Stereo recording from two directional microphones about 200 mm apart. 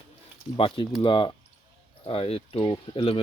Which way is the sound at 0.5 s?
25° left (ahead or behind).